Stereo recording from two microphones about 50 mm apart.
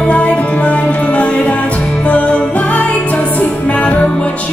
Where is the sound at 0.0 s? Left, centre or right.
Left.